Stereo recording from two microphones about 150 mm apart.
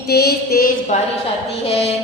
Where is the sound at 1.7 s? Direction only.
40° left (ahead or behind).